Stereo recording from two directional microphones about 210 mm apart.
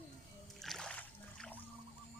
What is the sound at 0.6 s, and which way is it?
Music, 5° left (ahead or behind).